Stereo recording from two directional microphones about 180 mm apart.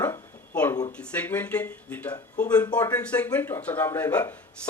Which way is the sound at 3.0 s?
5° left (ahead or behind).